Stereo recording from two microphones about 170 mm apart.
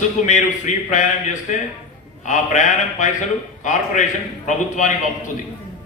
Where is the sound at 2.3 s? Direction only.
45° left (ahead or behind).